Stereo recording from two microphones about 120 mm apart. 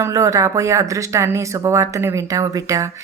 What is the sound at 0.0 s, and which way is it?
Speech, 25° right (ahead or behind).